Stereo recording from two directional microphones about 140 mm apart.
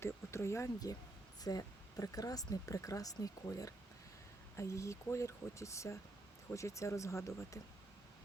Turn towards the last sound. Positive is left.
turn(degrees=20)  # may be behind; listen again after turning